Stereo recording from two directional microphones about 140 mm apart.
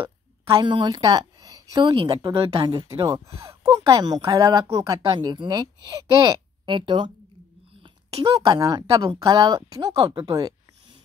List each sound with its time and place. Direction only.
0.0 s a woman's voice: 35° right (ahead or behind)
3.1 s speech: 20° right (ahead or behind)
8.4 s speech: 25° right (ahead or behind)
10.0 s a sound: 25° right (ahead or behind)